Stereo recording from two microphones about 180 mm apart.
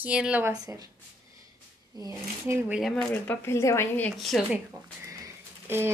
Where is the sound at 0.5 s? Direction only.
20° right (ahead or behind).